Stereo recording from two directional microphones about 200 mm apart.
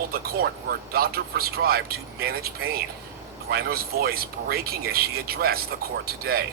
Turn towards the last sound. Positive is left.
turn(degrees=-50)  # may be behind; listen again after turning